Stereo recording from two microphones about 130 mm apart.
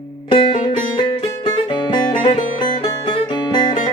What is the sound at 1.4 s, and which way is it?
Music, 35° left (ahead or behind).